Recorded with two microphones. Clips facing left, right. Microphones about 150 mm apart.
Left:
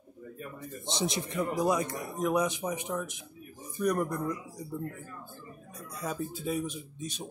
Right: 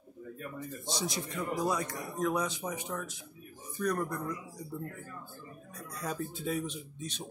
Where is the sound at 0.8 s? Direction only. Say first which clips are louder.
Left 4 dB; 20° left (ahead or behind).